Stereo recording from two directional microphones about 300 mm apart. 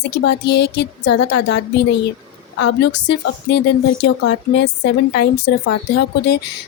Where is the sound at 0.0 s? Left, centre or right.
Left.